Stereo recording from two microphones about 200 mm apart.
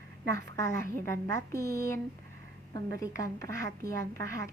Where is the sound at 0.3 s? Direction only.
15° left (ahead or behind).